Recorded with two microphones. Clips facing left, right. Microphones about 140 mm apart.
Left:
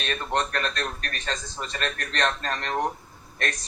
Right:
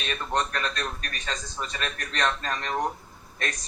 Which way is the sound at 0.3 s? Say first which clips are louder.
Left 1 dB; 60° left (ahead or behind).